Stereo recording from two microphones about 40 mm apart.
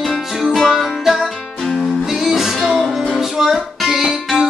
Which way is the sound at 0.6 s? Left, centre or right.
Centre.